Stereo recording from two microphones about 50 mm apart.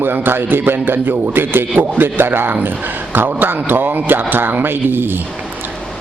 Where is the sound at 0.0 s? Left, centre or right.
Right.